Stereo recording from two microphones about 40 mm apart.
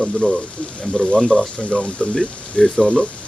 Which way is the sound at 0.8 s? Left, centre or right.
Left.